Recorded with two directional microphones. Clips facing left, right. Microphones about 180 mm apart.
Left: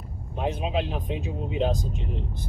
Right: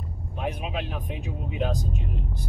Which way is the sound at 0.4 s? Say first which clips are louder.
Left 4 dB; 25° left (ahead or behind).